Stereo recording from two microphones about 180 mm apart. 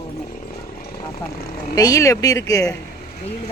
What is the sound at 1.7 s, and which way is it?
Speech, 20° left (ahead or behind).